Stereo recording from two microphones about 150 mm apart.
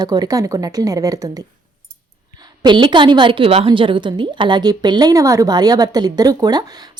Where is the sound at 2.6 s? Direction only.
30° right (ahead or behind).